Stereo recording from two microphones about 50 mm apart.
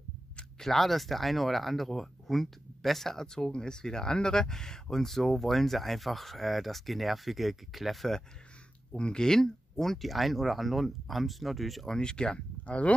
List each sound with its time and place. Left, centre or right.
0.6 s speech: centre
8.9 s speech: centre
12.0 s speech: centre